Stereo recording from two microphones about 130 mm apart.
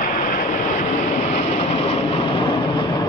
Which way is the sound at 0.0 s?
90° left.